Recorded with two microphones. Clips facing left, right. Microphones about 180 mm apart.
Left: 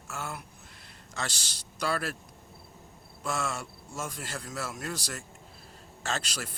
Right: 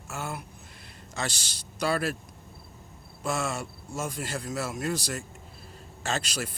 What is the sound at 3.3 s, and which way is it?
Speech, 20° right (ahead or behind).